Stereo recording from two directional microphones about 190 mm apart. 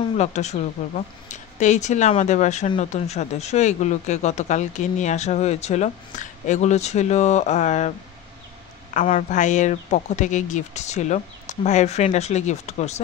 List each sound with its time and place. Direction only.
0.2 s speech: 35° left (ahead or behind)
8.9 s speech: 40° left (ahead or behind)